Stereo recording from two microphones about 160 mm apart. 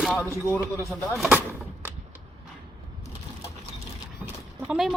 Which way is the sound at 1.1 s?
Centre (ahead or behind).